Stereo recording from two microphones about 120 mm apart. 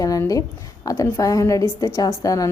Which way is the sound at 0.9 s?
25° left (ahead or behind).